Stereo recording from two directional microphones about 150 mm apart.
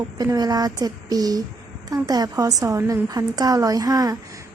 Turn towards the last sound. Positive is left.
turn(degrees=-25)  # may be behind; listen again after turning